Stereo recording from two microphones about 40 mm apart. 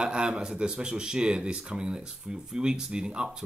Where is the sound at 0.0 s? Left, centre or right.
Right.